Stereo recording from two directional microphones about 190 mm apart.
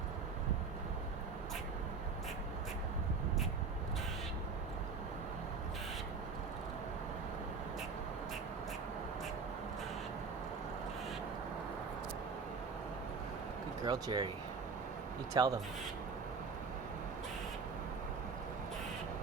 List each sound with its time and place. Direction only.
13.8 s speech: 20° right (ahead or behind)
15.3 s speech: 20° right (ahead or behind)